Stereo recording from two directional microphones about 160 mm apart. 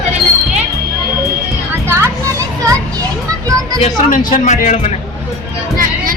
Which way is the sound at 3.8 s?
55° left (ahead or behind).